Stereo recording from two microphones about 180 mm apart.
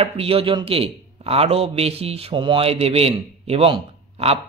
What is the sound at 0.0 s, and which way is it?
A man's voice, 30° right (ahead or behind).